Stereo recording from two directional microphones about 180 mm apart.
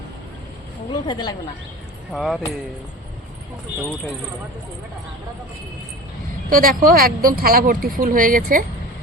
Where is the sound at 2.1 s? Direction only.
Centre (ahead or behind).